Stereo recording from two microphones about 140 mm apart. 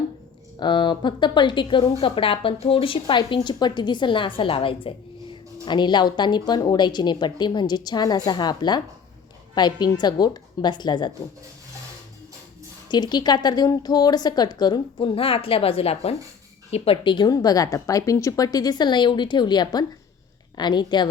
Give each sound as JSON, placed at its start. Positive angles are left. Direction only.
{"t": 0.6, "sound": "speech", "side_deg": 35}
{"t": 12.9, "sound": "a woman's voice", "side_deg": 30}